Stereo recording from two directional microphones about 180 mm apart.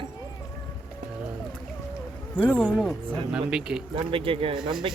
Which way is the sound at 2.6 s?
5° right (ahead or behind).